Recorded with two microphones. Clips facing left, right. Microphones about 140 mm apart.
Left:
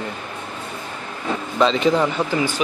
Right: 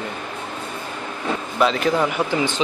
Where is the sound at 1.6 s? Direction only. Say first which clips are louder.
Left 2 dB; 5° right (ahead or behind).